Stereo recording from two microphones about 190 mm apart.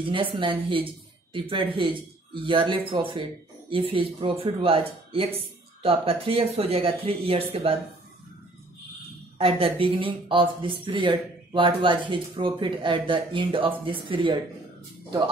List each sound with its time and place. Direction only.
0.1 s speech: 25° right (ahead or behind)
9.4 s speech: 30° right (ahead or behind)